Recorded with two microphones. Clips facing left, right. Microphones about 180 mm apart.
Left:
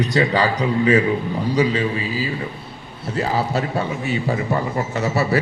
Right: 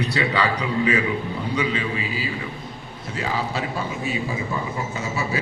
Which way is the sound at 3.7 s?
65° left (ahead or behind).